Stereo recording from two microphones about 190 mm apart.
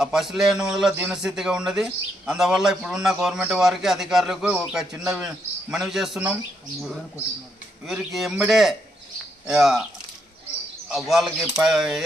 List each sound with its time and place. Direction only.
0.0 s a man's voice: centre (ahead or behind)
7.9 s a man's voice: centre (ahead or behind)
10.8 s a man's voice: centre (ahead or behind)